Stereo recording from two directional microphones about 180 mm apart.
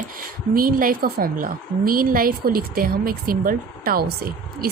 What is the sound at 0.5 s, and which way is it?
A woman's voice, 50° right (ahead or behind).